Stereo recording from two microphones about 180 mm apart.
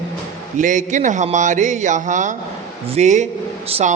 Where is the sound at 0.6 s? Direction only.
45° right (ahead or behind).